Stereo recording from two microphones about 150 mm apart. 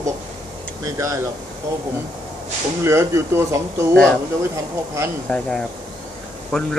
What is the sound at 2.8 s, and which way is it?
A man's voice, 20° right (ahead or behind).